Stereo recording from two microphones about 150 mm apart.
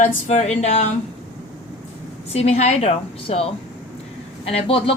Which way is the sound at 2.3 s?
45° left (ahead or behind).